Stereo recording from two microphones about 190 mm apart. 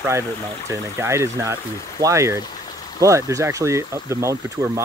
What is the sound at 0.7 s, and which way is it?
Speech, 15° right (ahead or behind).